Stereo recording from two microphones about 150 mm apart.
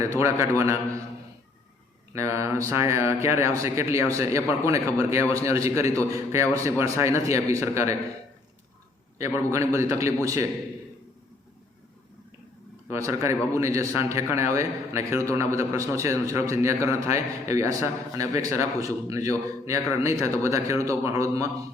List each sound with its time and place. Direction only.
0.0 s a man's voice: 20° right (ahead or behind)
2.1 s a man's voice: 20° right (ahead or behind)
9.1 s a man's voice: 20° right (ahead or behind)
12.9 s a man's voice: 20° right (ahead or behind)